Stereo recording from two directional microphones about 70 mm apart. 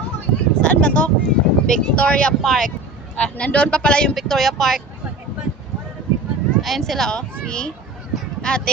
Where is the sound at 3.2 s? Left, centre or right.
Centre.